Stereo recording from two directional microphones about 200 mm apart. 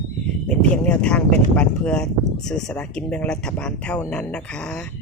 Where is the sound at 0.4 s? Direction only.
5° left (ahead or behind).